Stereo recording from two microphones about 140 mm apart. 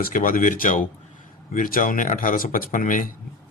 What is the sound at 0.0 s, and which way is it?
Speech, 85° left.